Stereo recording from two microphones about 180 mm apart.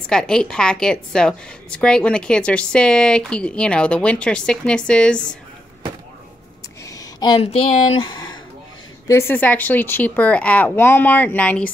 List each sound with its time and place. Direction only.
0.1 s a woman's voice: 5° left (ahead or behind)
6.9 s speech: 20° left (ahead or behind)
9.3 s speech: 10° left (ahead or behind)